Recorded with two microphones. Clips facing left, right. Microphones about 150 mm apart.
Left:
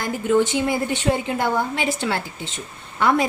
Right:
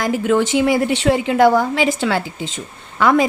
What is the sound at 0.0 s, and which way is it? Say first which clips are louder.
Speech: right 3 dB; 90° right.